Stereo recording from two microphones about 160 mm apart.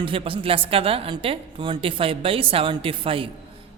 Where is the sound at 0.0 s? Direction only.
35° right (ahead or behind).